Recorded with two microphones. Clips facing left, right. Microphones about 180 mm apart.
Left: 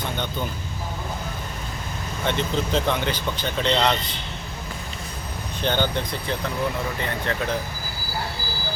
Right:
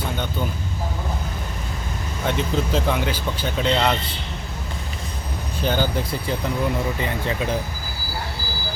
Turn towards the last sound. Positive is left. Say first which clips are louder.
# right 2 dB
turn(degrees=-10)  # may be behind; listen again after turning